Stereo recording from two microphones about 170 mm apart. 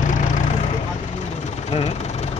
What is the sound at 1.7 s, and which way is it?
Vehicle, 35° left (ahead or behind).